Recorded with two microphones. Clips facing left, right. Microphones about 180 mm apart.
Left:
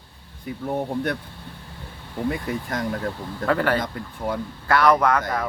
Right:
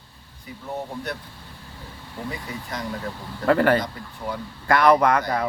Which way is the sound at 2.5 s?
50° left (ahead or behind).